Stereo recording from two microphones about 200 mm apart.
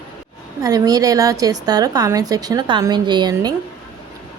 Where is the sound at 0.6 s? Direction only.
20° right (ahead or behind).